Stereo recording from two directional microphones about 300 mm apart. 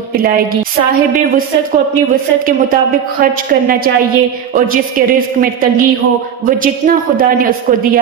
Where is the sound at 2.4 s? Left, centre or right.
Right.